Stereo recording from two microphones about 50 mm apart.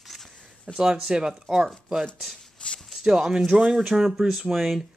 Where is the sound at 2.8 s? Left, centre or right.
Centre.